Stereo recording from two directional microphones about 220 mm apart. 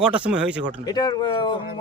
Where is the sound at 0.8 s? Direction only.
20° left (ahead or behind).